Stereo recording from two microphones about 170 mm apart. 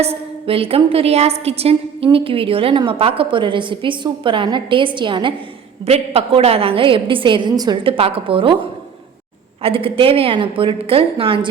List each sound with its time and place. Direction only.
0.0 s a woman's voice: 35° right (ahead or behind)
9.6 s a woman's voice: 35° right (ahead or behind)